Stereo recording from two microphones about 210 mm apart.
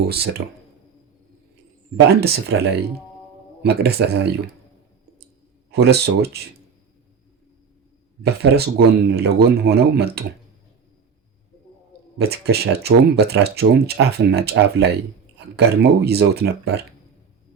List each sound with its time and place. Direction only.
0.1 s speech: 50° right (ahead or behind)
2.0 s speech: 50° right (ahead or behind)
5.7 s speech: 50° right (ahead or behind)
8.2 s speech: 50° right (ahead or behind)
12.1 s speech: 50° right (ahead or behind)